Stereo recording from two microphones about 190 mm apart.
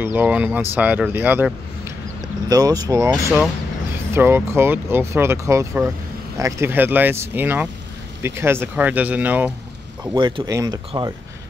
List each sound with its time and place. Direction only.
0.0 s speech: 10° right (ahead or behind)
2.5 s speech: 20° right (ahead or behind)
10.1 s speech: 25° right (ahead or behind)